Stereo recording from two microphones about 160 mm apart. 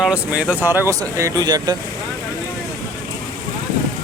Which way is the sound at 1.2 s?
20° right (ahead or behind).